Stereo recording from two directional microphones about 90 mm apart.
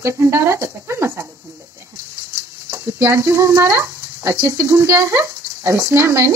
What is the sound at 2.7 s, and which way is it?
Speech, 30° right (ahead or behind).